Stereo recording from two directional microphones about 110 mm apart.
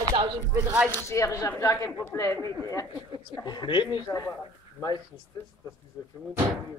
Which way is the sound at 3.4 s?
40° left (ahead or behind).